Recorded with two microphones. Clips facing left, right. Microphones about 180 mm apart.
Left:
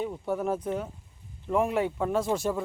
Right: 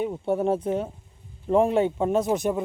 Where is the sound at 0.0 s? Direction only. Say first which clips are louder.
Right 5 dB; 25° right (ahead or behind).